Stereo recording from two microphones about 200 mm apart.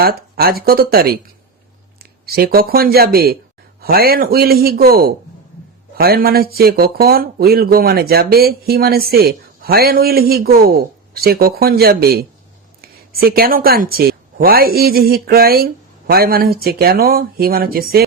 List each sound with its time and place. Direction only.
0.0 s speech: 50° right (ahead or behind)
2.2 s speech: 50° right (ahead or behind)